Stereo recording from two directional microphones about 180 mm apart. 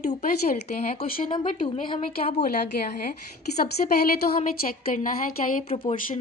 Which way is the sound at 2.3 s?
65° left (ahead or behind).